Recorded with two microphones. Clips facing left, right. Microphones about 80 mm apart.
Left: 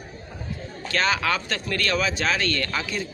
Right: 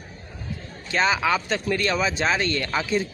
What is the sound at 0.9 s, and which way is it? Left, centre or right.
Speech, centre.